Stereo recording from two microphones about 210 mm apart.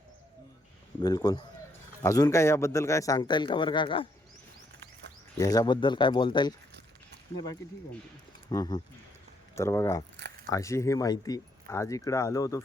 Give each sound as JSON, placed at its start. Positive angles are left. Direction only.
{"t": 1.0, "sound": "a man's voice", "side_deg": 20}
{"t": 5.4, "sound": "speech", "side_deg": 15}
{"t": 8.4, "sound": "a man's voice", "side_deg": 20}